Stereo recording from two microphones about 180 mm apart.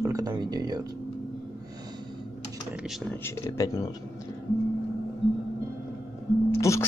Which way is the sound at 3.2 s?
20° left (ahead or behind).